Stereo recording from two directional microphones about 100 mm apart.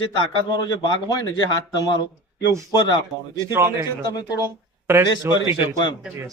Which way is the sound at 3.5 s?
25° right (ahead or behind).